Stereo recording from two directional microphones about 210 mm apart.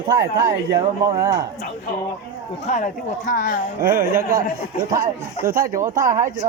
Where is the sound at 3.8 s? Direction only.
45° right (ahead or behind).